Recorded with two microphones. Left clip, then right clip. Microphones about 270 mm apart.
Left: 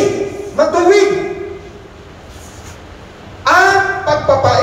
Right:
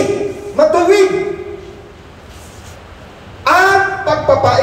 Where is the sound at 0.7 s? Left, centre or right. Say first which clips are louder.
Even; right.